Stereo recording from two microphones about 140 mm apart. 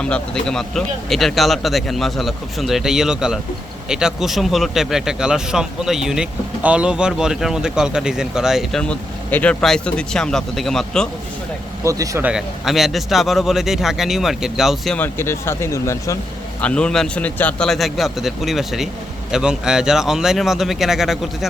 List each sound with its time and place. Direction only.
0.0 s speech: 5° left (ahead or behind)
11.8 s speech: 20° right (ahead or behind)
12.2 s speech: 5° right (ahead or behind)
14.9 s speech: 15° left (ahead or behind)
16.6 s speech: 5° left (ahead or behind)